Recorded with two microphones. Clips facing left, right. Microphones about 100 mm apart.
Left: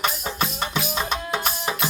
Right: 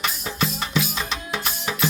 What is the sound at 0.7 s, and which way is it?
Music, 40° left (ahead or behind).